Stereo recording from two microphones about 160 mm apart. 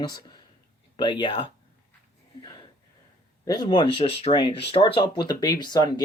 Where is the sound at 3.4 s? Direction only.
25° left (ahead or behind).